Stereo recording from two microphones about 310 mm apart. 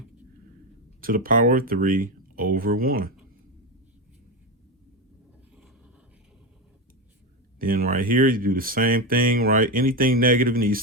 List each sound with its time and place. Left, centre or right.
1.0 s speech: right
7.6 s speech: right